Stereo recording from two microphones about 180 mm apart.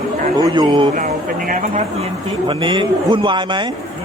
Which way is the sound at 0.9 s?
45° right (ahead or behind).